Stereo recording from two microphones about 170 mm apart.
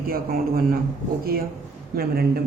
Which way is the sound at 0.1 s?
60° right (ahead or behind).